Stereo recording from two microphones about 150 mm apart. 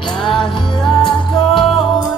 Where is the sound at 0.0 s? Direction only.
Centre (ahead or behind).